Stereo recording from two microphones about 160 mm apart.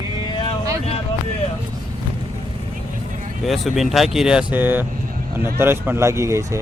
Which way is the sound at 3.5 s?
Centre (ahead or behind).